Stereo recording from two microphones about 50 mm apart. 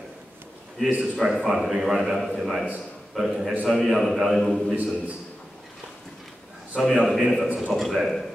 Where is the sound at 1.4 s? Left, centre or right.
Centre.